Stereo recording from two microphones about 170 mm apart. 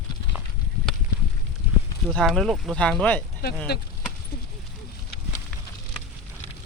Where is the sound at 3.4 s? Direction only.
70° left (ahead or behind).